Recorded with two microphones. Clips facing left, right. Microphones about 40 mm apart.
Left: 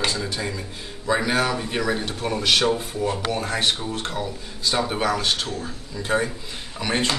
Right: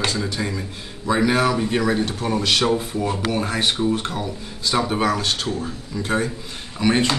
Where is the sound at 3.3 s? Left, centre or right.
Centre.